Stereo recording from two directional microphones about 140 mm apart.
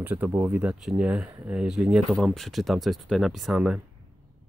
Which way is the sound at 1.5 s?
5° right (ahead or behind).